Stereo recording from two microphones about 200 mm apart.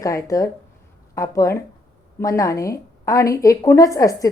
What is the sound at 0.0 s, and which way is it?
A woman's voice, 15° left (ahead or behind).